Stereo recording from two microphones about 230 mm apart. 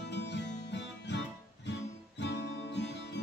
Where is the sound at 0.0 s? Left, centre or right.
Left.